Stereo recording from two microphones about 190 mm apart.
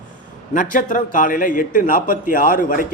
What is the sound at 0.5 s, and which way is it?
A man's voice, 45° left (ahead or behind).